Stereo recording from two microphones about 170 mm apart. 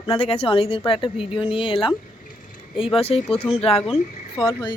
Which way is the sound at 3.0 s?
35° left (ahead or behind).